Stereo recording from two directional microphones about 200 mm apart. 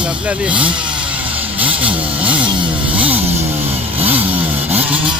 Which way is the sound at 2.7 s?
5° right (ahead or behind).